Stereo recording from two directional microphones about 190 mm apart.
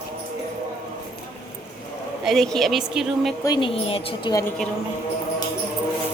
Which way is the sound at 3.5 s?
25° left (ahead or behind).